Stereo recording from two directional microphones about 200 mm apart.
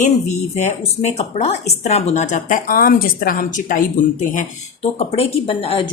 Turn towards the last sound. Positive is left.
turn(degrees=25)  # may be behind; listen again after turning